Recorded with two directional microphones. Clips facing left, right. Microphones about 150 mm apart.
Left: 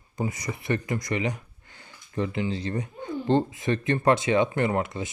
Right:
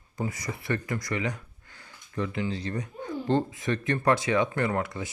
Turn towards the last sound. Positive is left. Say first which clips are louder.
# left 3 dB
turn(degrees=20)  # may be behind; listen again after turning